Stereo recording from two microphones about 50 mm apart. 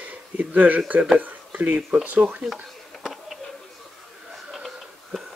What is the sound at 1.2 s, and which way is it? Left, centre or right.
Speech, right.